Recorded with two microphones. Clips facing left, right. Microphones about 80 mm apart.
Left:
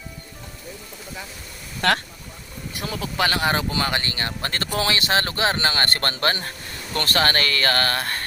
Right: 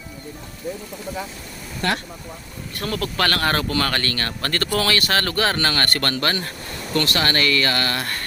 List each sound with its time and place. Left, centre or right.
2.7 s speech: centre; by 8.2 s left